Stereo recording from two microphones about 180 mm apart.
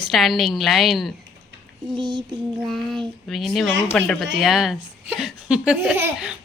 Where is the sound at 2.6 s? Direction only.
Centre (ahead or behind).